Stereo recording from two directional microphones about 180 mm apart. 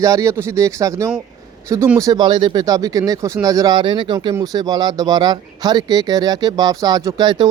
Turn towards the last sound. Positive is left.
turn(degrees=-25)  # may be behind; listen again after turning